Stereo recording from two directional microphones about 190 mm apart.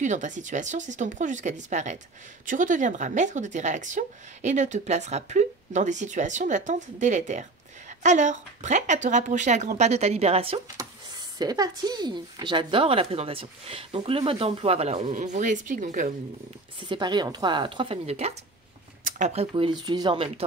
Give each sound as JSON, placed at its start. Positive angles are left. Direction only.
{"t": 0.0, "sound": "a woman's voice", "side_deg": -40}
{"t": 10.8, "sound": "speech", "side_deg": -20}
{"t": 16.9, "sound": "speech", "side_deg": -25}
{"t": 19.0, "sound": "a sound", "side_deg": -40}
{"t": 19.5, "sound": "speech", "side_deg": -25}